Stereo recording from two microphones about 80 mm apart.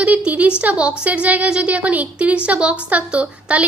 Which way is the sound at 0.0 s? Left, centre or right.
Centre.